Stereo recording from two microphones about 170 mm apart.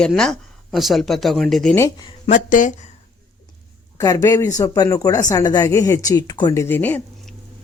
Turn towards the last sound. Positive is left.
turn(degrees=10)  # may be behind; listen again after turning